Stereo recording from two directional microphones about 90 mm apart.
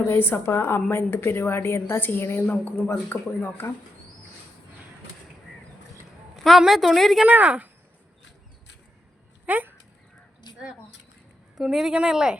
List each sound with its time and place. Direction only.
0.1 s a woman's voice: 25° left (ahead or behind)
6.3 s a woman's voice: centre (ahead or behind)
7.3 s speech: 15° right (ahead or behind)
9.5 s speech: 20° right (ahead or behind)
10.5 s a sound: 55° left (ahead or behind)
11.5 s speech: 5° right (ahead or behind)